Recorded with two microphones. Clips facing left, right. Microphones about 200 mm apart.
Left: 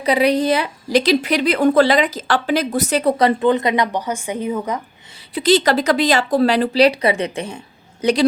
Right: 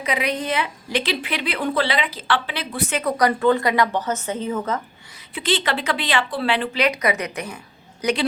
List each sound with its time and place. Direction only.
0.0 s a woman's voice: 35° left (ahead or behind); by 4.8 s 15° left (ahead or behind)
5.3 s a woman's voice: 40° left (ahead or behind)